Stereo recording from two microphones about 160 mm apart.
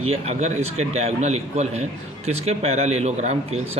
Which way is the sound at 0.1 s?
40° right (ahead or behind).